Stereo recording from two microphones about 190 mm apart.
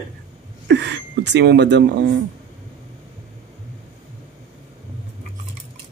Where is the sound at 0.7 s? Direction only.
65° right (ahead or behind).